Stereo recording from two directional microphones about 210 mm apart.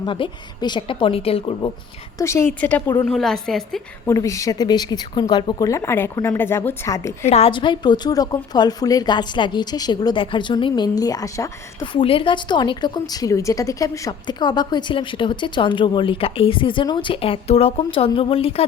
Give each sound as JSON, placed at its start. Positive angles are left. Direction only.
{"t": 0.0, "sound": "a woman's voice", "side_deg": 20}
{"t": 2.1, "sound": "a woman's voice", "side_deg": 15}
{"t": 4.1, "sound": "speech", "side_deg": 15}
{"t": 7.3, "sound": "a woman's voice", "side_deg": 30}